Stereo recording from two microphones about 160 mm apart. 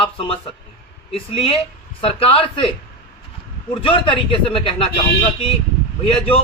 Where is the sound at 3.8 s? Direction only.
35° left (ahead or behind).